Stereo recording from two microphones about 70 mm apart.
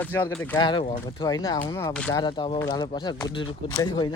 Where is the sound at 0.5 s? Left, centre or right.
Left.